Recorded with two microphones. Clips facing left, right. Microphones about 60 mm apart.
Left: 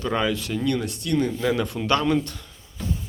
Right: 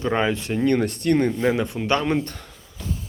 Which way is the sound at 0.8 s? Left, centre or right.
Right.